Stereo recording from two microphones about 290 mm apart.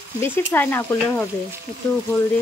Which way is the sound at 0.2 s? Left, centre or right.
Centre.